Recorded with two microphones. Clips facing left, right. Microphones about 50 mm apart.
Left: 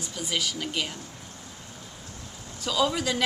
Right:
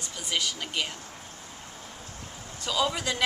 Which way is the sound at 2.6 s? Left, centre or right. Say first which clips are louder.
Left 2 dB; centre.